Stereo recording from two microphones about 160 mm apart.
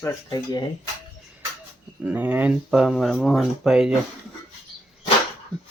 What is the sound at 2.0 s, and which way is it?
Speech, 10° right (ahead or behind).